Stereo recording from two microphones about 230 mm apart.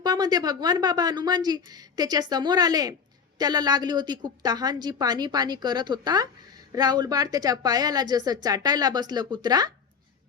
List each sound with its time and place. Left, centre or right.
0.0 s a woman's voice: centre